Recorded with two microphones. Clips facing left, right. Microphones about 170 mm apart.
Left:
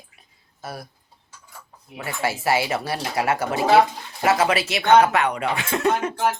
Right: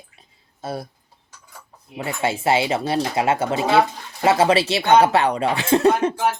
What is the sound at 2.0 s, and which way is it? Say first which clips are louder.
Speech: right 3 dB; 25° right (ahead or behind).